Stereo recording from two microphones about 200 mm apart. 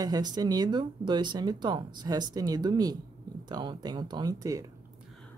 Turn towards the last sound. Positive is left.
turn(degrees=-15)  # may be behind; listen again after turning